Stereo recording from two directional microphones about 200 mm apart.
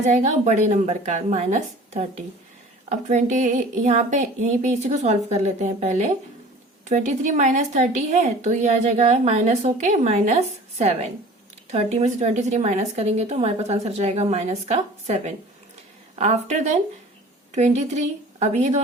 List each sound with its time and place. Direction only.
0.0 s a woman's voice: 35° right (ahead or behind)